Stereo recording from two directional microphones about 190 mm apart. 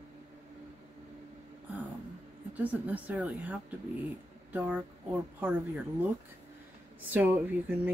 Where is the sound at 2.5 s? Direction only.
10° right (ahead or behind).